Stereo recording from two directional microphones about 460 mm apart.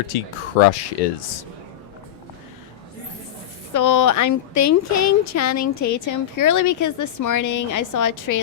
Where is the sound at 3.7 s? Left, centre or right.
Left.